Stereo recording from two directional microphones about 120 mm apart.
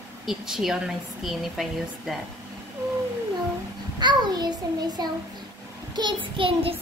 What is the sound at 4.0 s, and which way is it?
A child's voice, 35° right (ahead or behind).